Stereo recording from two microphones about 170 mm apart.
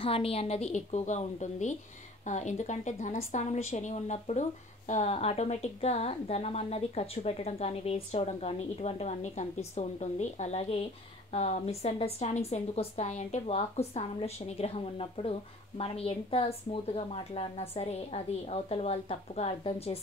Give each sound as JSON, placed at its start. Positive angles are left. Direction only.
{"t": 0.0, "sound": "speech", "side_deg": 35}